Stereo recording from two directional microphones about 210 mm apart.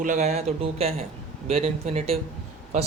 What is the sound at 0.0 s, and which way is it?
Speech, 35° right (ahead or behind).